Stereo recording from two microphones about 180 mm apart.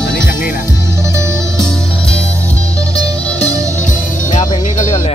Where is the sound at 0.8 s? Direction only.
15° right (ahead or behind).